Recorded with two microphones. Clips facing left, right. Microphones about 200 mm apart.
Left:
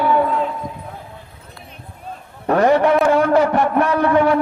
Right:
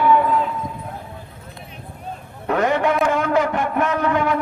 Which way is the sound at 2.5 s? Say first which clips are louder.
Left 5 dB; 40° left (ahead or behind).